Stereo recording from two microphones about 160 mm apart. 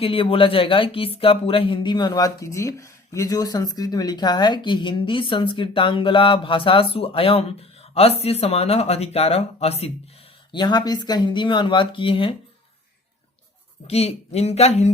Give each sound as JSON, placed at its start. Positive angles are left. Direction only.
{"t": 0.0, "sound": "speech", "side_deg": 35}
{"t": 10.5, "sound": "speech", "side_deg": 25}
{"t": 13.8, "sound": "speech", "side_deg": 40}